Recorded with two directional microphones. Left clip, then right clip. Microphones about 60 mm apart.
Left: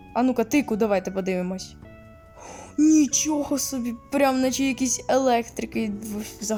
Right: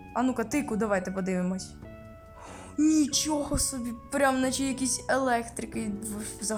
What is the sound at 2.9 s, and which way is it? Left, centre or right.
Speech, left.